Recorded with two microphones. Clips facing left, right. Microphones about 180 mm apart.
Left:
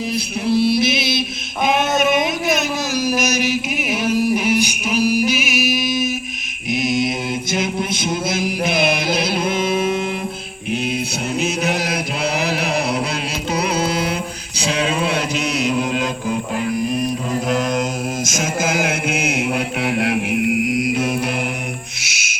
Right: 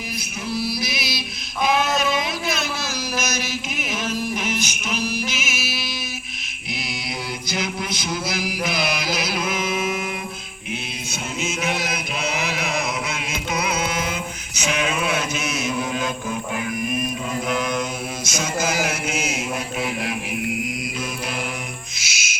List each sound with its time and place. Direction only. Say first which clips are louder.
0.4 s mantra: left 10 dB; 25° left (ahead or behind)
1.6 s a sound: left 4 dB; 20° left (ahead or behind)
6.8 s mantra: left 19 dB; 20° left (ahead or behind)
7.5 s a sound: left 4 dB; 25° left (ahead or behind)
8.6 s mantra: left 6 dB; 25° left (ahead or behind)
11.3 s chant: left 5 dB; 40° left (ahead or behind)
13.5 s mantra: left 5 dB; 35° left (ahead or behind)
18.3 s chant: even; 50° left (ahead or behind); by 21.1 s 70° left (ahead or behind)
22.0 s cricket: left 1 dB; 60° left (ahead or behind)